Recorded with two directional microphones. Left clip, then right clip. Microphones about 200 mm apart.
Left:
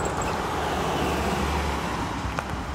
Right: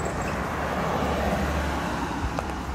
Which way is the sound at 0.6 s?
55° left (ahead or behind).